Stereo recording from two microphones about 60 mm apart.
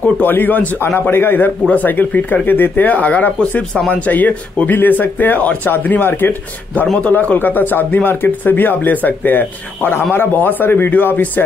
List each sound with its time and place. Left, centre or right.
0.0 s speech: left